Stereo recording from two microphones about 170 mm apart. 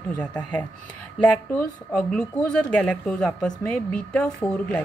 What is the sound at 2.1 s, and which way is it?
A woman's voice, 5° left (ahead or behind).